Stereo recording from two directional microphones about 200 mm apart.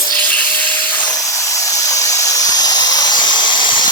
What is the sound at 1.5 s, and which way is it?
Steam, 15° left (ahead or behind).